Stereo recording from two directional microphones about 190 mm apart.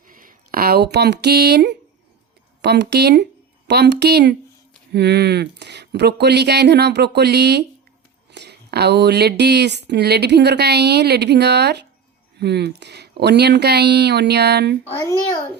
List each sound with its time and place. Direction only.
0.1 s speech: 45° right (ahead or behind)